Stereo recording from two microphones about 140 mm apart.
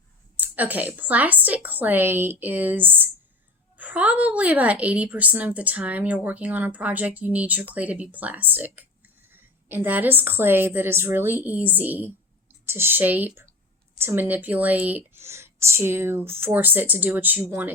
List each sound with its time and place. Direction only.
0.3 s a woman's voice: 10° right (ahead or behind)